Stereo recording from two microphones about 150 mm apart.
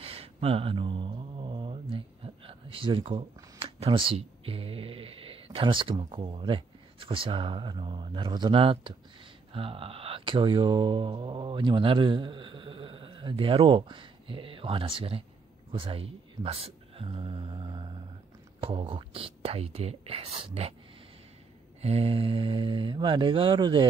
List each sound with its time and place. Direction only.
0.0 s mantra: 40° right (ahead or behind)
3.5 s speech: 40° right (ahead or behind)
21.8 s speech: 40° right (ahead or behind)